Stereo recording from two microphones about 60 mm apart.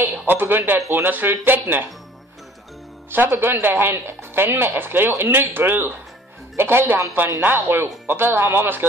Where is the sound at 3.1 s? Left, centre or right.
Right.